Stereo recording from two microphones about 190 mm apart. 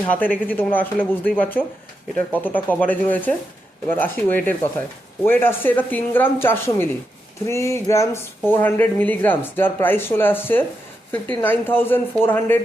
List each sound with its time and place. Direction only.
0.0 s speech: 10° left (ahead or behind)